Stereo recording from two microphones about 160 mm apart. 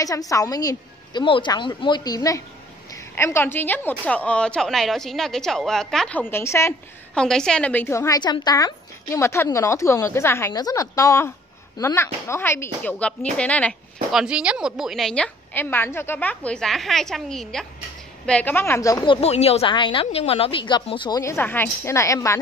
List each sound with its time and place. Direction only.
0.0 s a woman's voice: 20° left (ahead or behind)
7.2 s a woman's voice: 5° left (ahead or behind)
14.1 s a woman's voice: 5° right (ahead or behind); by 19.0 s 20° left (ahead or behind)
19.0 s speech: 40° left (ahead or behind)
21.2 s a woman's voice: 15° left (ahead or behind)